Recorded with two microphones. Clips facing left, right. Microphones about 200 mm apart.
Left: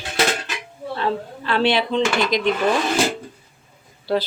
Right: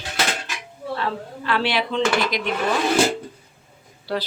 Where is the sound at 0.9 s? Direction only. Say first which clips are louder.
Left 3 dB; 25° left (ahead or behind).